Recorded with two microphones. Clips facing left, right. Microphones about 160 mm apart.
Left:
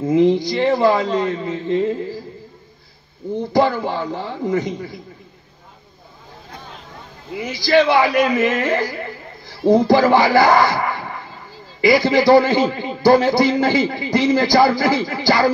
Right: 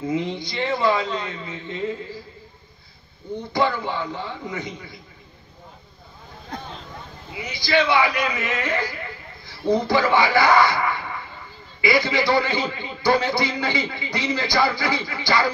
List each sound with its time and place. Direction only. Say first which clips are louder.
0.0 s a man's voice: left 11 dB; 40° left (ahead or behind)
3.5 s a man's voice: left 5 dB; 40° left (ahead or behind)
7.3 s a man's voice: left 6 dB; 45° left (ahead or behind)